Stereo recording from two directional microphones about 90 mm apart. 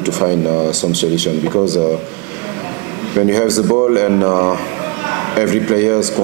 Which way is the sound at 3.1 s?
15° right (ahead or behind).